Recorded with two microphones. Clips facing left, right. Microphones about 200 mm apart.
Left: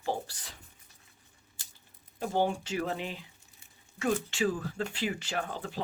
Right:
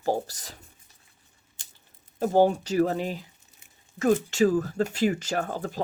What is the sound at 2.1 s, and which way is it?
Speech, 40° right (ahead or behind).